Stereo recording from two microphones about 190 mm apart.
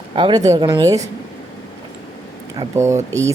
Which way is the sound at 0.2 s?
20° right (ahead or behind).